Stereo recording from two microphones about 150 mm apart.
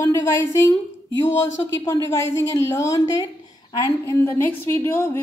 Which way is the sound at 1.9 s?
15° left (ahead or behind).